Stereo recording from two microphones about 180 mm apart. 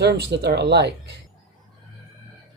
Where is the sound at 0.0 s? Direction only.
65° right (ahead or behind).